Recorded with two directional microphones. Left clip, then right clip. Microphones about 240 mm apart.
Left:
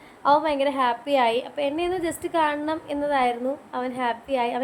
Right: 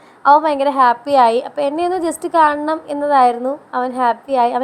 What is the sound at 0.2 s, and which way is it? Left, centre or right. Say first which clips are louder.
A woman's voice: right 8 dB; right.